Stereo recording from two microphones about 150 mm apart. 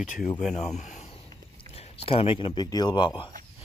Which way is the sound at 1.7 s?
40° left (ahead or behind).